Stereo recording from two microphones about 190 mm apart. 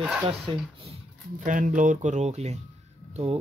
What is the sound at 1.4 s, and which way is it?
Speech, 45° right (ahead or behind).